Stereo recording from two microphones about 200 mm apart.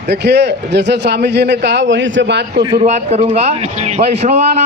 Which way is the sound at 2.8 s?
35° right (ahead or behind).